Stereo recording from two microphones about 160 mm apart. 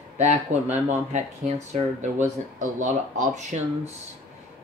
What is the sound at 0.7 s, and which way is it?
Speech, 45° right (ahead or behind).